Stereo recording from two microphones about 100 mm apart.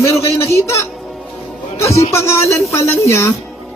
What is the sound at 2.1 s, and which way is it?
A man's voice, 30° left (ahead or behind).